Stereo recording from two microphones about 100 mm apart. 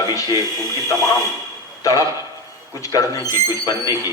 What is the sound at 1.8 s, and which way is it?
A man's voice, 35° left (ahead or behind).